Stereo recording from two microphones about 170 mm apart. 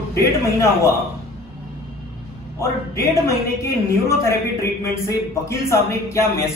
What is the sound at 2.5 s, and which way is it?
A man's voice, 15° left (ahead or behind).